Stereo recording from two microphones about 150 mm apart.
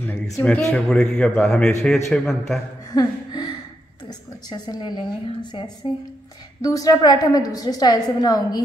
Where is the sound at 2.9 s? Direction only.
25° left (ahead or behind).